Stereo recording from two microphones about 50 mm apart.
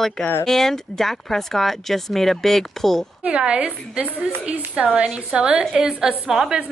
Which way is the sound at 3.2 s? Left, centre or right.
Right.